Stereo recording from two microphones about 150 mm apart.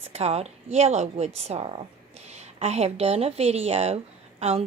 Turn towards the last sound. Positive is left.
turn(degrees=-45)  # may be behind; listen again after turning